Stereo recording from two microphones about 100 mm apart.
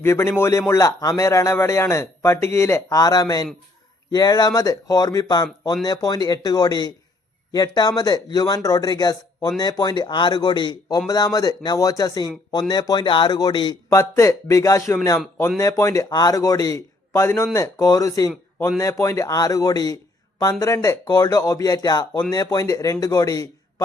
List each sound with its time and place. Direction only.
0.0 s a man's voice: 25° left (ahead or behind); by 10.8 s 50° left (ahead or behind)
10.8 s a man's voice: 40° left (ahead or behind)
13.9 s speech: 30° left (ahead or behind)
17.1 s speech: 30° left (ahead or behind)